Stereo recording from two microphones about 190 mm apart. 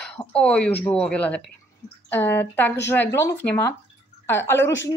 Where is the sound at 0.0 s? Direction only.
5° left (ahead or behind).